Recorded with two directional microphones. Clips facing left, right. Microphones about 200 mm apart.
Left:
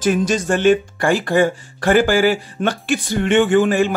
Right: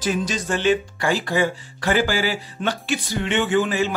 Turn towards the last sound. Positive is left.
turn(degrees=50)  # may be behind; listen again after turning